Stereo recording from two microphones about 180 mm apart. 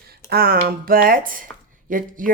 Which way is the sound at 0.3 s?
55° right (ahead or behind).